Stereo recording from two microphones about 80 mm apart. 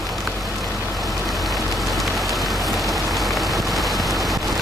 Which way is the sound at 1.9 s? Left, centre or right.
Centre.